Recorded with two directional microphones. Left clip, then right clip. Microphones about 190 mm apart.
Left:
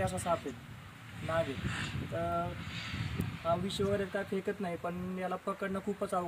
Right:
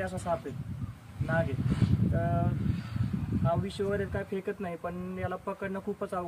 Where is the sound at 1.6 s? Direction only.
75° right (ahead or behind).